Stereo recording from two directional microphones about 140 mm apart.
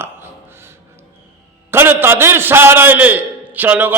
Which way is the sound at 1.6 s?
15° right (ahead or behind).